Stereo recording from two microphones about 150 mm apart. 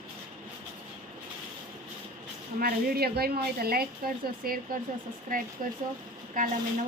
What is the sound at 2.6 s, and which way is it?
A woman's voice, 90° right.